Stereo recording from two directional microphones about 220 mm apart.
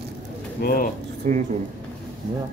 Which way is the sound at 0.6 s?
40° left (ahead or behind).